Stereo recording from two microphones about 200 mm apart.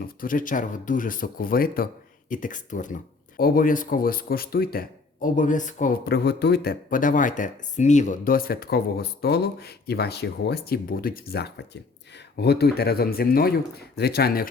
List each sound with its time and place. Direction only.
0.2 s speech: 45° left (ahead or behind)